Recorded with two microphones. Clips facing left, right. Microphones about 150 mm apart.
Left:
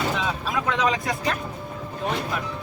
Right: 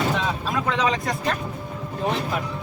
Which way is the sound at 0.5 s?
Centre (ahead or behind).